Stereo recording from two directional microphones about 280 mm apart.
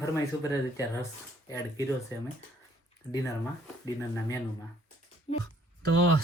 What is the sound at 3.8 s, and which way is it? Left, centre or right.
Speech, centre.